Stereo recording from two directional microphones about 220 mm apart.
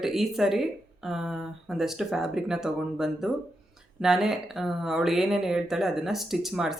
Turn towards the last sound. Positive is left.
turn(degrees=0)  # may be behind; listen again after turning